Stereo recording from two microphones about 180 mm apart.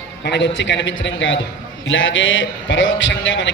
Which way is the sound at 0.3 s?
75° left (ahead or behind).